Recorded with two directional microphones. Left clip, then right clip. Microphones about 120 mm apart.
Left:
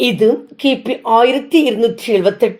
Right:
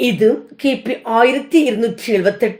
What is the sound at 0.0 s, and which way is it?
Speech, 30° left (ahead or behind).